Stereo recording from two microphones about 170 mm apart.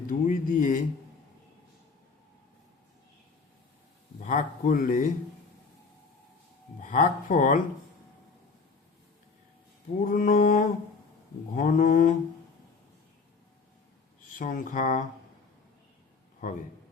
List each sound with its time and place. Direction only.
0.1 s speech: 50° left (ahead or behind)
4.2 s speech: 45° left (ahead or behind)
6.8 s speech: 50° left (ahead or behind)
10.0 s speech: 55° left (ahead or behind)
14.3 s speech: 55° left (ahead or behind)